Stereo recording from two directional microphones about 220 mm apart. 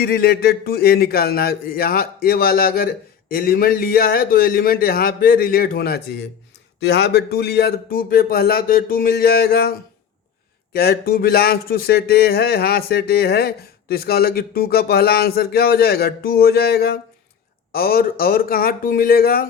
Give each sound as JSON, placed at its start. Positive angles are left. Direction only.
{"t": 0.0, "sound": "speech", "side_deg": 45}